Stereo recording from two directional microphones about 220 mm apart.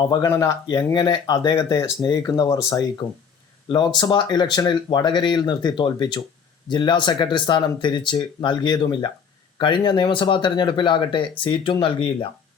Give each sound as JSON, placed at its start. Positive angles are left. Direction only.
{"t": 0.0, "sound": "speech", "side_deg": 20}